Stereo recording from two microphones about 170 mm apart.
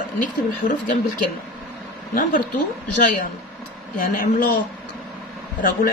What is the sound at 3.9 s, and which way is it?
Speech, 55° left (ahead or behind).